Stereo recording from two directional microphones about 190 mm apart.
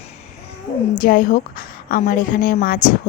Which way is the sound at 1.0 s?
45° left (ahead or behind).